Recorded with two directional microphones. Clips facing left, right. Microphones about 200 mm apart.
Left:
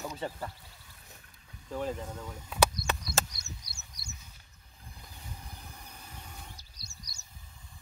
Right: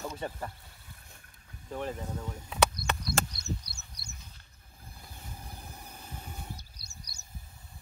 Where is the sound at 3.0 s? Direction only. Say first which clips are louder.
Right 2 dB; 60° right (ahead or behind).